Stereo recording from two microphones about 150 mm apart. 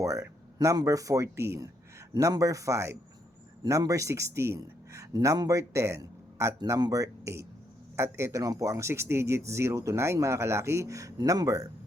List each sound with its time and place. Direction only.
0.0 s a man's voice: 20° right (ahead or behind)